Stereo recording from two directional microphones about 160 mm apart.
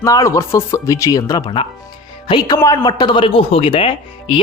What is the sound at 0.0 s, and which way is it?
Speech, 20° left (ahead or behind).